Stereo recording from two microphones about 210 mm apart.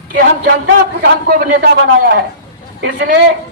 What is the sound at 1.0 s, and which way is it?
A man's voice, 45° right (ahead or behind).